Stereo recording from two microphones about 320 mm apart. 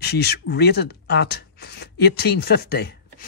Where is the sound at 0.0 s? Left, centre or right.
Left.